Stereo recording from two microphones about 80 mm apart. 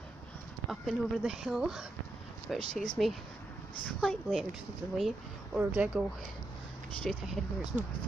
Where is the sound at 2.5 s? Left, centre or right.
Centre.